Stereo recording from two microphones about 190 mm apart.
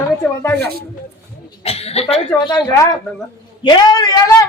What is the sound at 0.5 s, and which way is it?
Speech, 60° right (ahead or behind).